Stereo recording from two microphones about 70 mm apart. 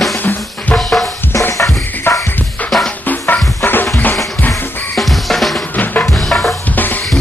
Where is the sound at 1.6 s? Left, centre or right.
Left.